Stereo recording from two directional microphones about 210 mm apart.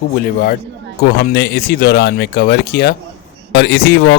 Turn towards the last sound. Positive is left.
turn(degrees=50)  # may be behind; listen again after turning